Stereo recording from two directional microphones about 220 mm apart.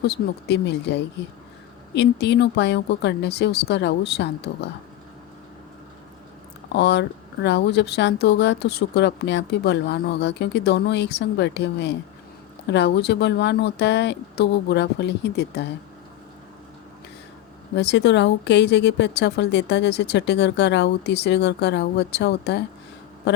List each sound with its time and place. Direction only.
0.1 s speech: 50° left (ahead or behind)
6.7 s speech: 50° left (ahead or behind)
17.7 s speech: 50° left (ahead or behind)